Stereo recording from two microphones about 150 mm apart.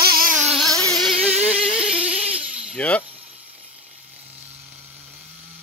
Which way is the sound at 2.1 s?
40° right (ahead or behind).